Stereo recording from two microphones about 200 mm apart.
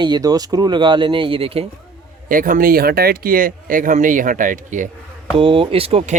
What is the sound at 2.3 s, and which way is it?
Speech, 45° right (ahead or behind).